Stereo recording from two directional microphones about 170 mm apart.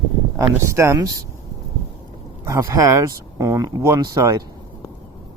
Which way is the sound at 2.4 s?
15° right (ahead or behind).